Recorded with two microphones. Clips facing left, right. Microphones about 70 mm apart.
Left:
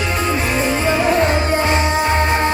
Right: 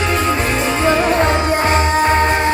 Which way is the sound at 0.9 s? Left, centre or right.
Right.